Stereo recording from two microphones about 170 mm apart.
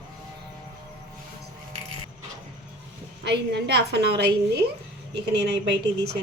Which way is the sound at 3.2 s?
80° right.